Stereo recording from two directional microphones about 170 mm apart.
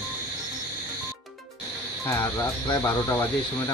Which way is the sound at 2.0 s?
15° left (ahead or behind).